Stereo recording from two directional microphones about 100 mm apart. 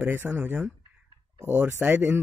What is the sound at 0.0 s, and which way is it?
A man's voice, 20° right (ahead or behind).